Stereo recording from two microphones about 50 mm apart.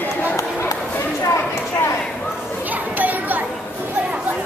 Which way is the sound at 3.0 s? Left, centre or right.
Right.